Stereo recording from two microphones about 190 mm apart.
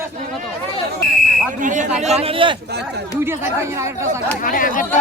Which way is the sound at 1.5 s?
40° right (ahead or behind).